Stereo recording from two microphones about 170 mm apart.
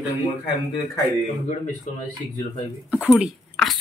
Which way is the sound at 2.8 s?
5° right (ahead or behind).